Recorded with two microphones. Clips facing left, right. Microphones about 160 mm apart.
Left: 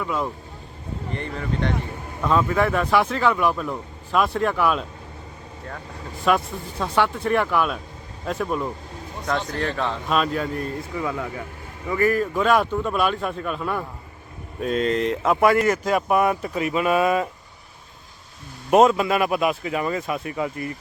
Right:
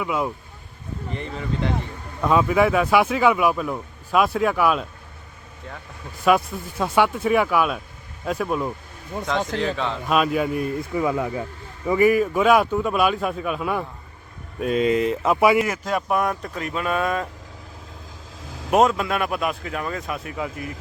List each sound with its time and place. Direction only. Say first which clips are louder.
0.0 s speech: right 1 dB; 10° right (ahead or behind)
6.2 s speech: right 2 dB; 5° right (ahead or behind)
18.4 s vehicle: right 3 dB; 90° right
18.7 s speech: left 2 dB; centre (ahead or behind)